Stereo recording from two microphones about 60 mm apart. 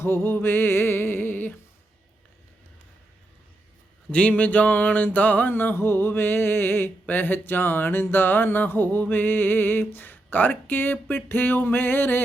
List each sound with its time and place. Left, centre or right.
0.0 s music: left
4.1 s music: left